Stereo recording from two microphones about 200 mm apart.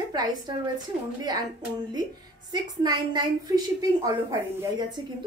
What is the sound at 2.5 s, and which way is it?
A woman's voice, 20° right (ahead or behind).